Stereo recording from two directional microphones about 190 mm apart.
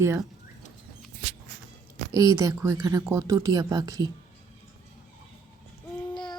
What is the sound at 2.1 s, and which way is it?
A woman's voice, 15° right (ahead or behind).